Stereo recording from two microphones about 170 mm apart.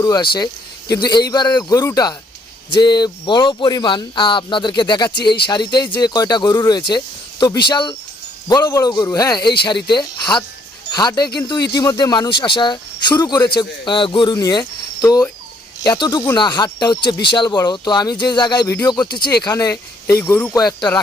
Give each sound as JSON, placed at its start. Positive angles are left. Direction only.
{"t": 0.0, "sound": "speech", "side_deg": 20}